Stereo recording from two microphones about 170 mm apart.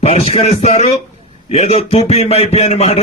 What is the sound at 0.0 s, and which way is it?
Speech, 35° left (ahead or behind).